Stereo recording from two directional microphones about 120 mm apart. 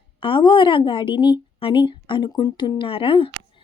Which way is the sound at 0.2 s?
45° left (ahead or behind).